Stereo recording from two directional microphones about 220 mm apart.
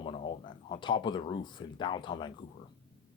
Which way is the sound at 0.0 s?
20° left (ahead or behind).